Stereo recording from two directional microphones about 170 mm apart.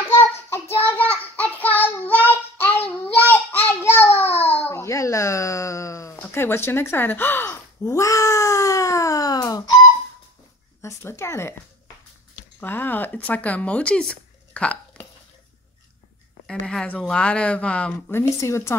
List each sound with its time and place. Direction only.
0.1 s child singing: 15° left (ahead or behind)
4.6 s a sound: 15° left (ahead or behind)
10.8 s speech: 15° left (ahead or behind)
12.5 s speech: 10° left (ahead or behind)
16.6 s speech: 5° left (ahead or behind)